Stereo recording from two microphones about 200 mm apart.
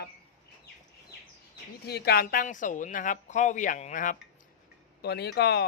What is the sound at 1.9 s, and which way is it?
Speech, 55° left (ahead or behind).